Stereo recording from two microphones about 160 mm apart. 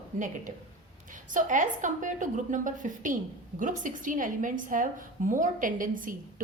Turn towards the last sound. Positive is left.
turn(degrees=-55)  # may be behind; listen again after turning